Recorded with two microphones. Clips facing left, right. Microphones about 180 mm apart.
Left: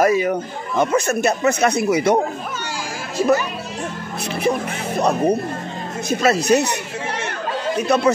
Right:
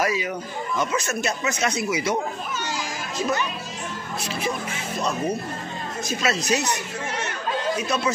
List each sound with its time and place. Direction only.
0.0 s speech: 50° left (ahead or behind)
4.3 s speech: 60° left (ahead or behind)